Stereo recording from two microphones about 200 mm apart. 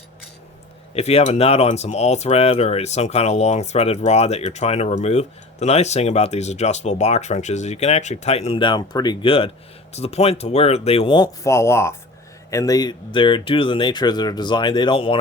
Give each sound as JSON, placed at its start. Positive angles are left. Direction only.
{"t": 0.9, "sound": "speech", "side_deg": 30}